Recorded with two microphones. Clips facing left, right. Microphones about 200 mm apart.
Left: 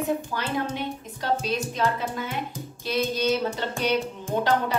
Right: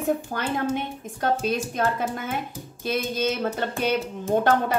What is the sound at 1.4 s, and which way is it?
A woman's voice, 50° right (ahead or behind).